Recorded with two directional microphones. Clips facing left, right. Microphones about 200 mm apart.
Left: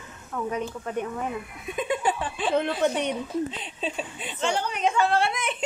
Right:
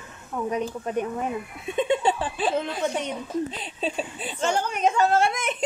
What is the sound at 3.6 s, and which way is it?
Speech, 35° right (ahead or behind).